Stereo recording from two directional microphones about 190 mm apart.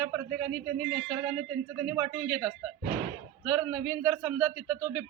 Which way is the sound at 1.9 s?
15° right (ahead or behind).